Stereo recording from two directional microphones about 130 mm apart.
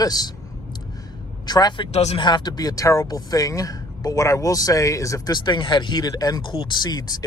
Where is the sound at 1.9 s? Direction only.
55° left (ahead or behind).